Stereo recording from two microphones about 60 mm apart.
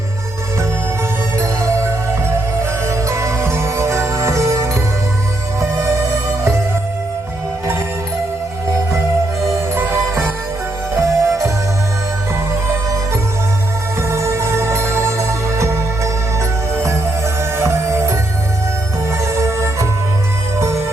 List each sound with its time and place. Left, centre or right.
1.4 s music: right
9.7 s music: right
14.1 s music: right
19.2 s music: right